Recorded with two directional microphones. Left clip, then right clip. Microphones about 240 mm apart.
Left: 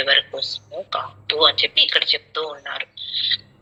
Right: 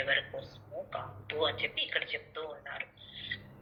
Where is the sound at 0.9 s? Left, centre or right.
Left.